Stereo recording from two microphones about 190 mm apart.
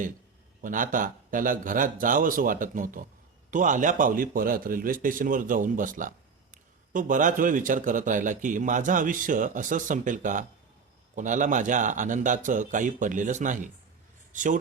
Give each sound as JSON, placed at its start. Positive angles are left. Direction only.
{"t": 0.6, "sound": "a man's voice", "side_deg": -45}